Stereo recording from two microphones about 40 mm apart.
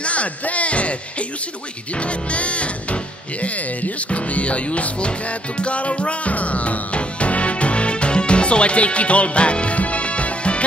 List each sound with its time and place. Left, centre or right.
0.0 s music: left
2.0 s speech: left
5.6 s music: left